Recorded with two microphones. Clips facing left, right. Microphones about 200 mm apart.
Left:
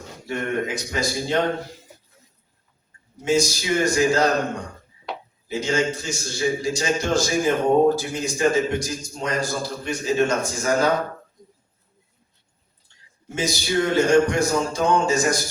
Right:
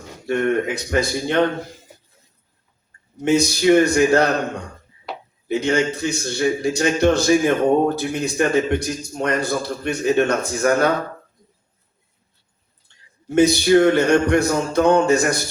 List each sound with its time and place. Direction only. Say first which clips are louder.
0.3 s a man's voice: right 6 dB; 60° right (ahead or behind)
3.2 s a man's voice: right 6 dB; 60° right (ahead or behind)
5.5 s a man's voice: right 4 dB; 60° right (ahead or behind)
13.3 s a man's voice: right 10 dB; 60° right (ahead or behind)